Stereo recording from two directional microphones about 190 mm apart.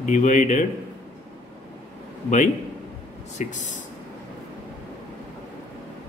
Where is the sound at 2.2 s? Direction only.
40° left (ahead or behind).